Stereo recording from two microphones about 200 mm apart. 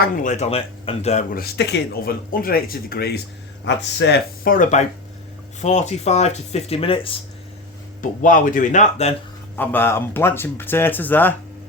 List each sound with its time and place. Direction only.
0.0 s speech: 40° left (ahead or behind)
1.3 s speech: 50° left (ahead or behind)
3.6 s speech: 60° left (ahead or behind); by 7.1 s 25° left (ahead or behind)
8.2 s speech: 40° left (ahead or behind)
9.6 s speech: 10° left (ahead or behind)